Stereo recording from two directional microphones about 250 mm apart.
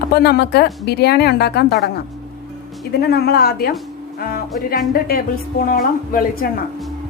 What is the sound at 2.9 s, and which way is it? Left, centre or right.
Speech, left.